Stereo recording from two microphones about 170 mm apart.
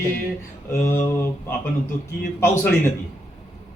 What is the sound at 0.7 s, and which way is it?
Speech, 15° left (ahead or behind).